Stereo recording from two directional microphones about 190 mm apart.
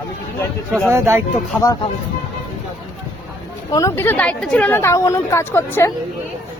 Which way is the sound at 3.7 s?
15° left (ahead or behind).